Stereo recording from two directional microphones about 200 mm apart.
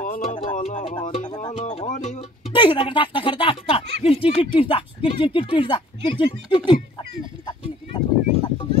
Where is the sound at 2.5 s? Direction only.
25° left (ahead or behind).